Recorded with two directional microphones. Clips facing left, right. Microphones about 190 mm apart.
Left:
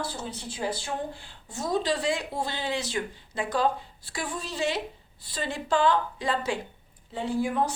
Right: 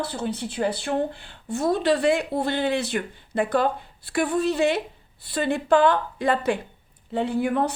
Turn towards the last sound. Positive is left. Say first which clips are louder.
# right 4 dB
turn(degrees=-60)  # may be behind; listen again after turning